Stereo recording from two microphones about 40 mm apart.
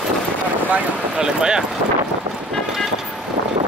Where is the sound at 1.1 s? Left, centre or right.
Centre.